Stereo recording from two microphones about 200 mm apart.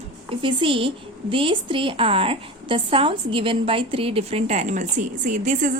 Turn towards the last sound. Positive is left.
turn(degrees=-40)  # may be behind; listen again after turning